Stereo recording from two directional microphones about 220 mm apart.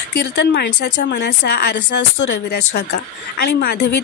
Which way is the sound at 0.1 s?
50° left (ahead or behind).